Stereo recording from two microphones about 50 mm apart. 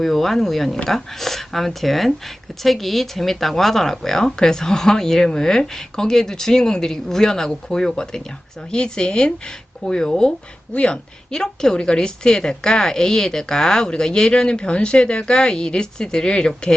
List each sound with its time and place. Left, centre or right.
0.0 s speech: centre
10.7 s a woman's voice: left
11.3 s speech: centre